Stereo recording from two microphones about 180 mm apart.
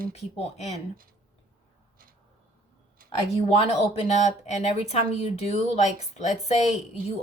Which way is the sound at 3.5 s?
35° left (ahead or behind).